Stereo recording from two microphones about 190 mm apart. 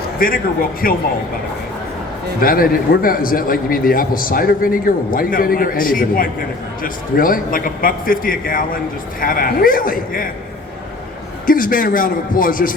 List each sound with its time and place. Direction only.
0.2 s a man's voice: 50° left (ahead or behind)
2.4 s a man's voice: 50° left (ahead or behind)
11.4 s a man's voice: 45° left (ahead or behind)